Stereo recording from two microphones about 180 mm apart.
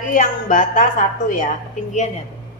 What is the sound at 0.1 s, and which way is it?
A woman's voice, 50° left (ahead or behind).